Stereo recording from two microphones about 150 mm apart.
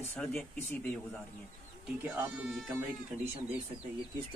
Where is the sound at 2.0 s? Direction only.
10° right (ahead or behind).